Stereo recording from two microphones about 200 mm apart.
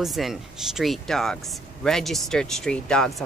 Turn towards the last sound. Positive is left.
turn(degrees=5)  # may be behind; listen again after turning